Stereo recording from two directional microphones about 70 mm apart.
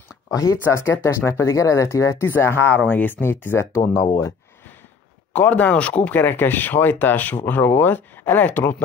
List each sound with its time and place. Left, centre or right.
0.3 s speech: left
2.2 s speech: left
5.3 s speech: left